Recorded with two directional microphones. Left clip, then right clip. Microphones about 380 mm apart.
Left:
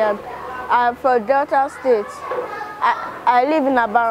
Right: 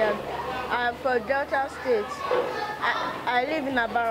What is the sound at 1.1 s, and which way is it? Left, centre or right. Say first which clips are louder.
A woman's voice: left 9 dB; left.